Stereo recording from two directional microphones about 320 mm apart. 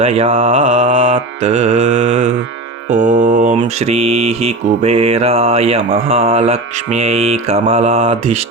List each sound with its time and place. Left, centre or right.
0.0 s mantra: centre